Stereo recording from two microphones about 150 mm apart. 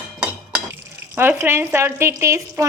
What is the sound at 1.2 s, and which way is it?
Speech, 15° right (ahead or behind).